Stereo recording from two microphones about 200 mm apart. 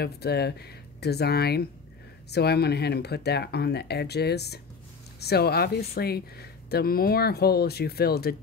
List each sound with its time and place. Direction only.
0.0 s speech: 55° left (ahead or behind)